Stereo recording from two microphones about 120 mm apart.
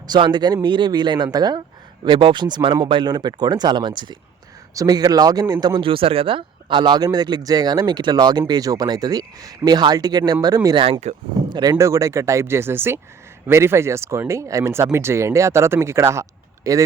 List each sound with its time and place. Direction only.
0.1 s speech: 35° right (ahead or behind)
11.1 s speech: 70° right (ahead or behind)
11.4 s speech: 35° right (ahead or behind)